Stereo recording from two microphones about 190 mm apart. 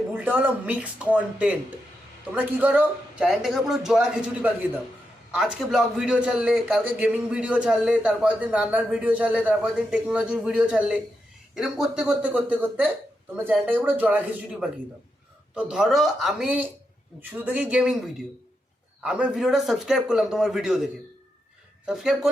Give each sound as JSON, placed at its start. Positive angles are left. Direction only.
{"t": 0.1, "sound": "a man's voice", "side_deg": -10}
{"t": 15.5, "sound": "a man's voice", "side_deg": -5}